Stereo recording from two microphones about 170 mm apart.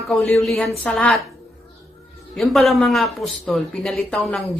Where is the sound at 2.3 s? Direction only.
Centre (ahead or behind).